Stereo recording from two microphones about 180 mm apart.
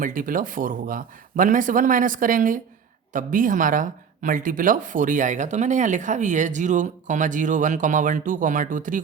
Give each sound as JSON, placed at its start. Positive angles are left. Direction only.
{"t": 0.0, "sound": "speech", "side_deg": -50}